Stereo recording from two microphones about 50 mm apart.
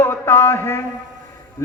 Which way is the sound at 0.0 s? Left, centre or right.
Left.